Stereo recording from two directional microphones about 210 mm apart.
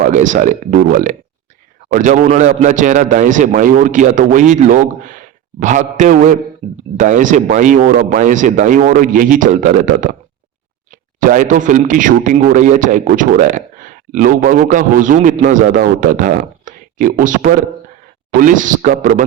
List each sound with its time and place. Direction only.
0.0 s speech: 35° right (ahead or behind)